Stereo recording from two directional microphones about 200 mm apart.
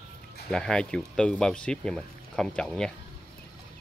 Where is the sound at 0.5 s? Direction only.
5° left (ahead or behind).